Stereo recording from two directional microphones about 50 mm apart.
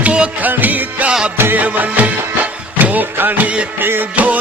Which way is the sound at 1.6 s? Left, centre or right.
Right.